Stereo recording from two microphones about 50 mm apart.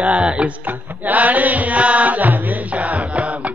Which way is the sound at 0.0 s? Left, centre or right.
Right.